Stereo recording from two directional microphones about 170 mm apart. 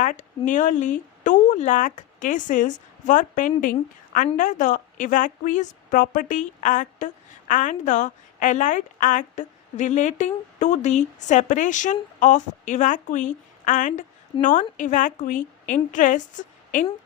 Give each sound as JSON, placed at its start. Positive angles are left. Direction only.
{"t": 0.0, "sound": "a woman's voice", "side_deg": 50}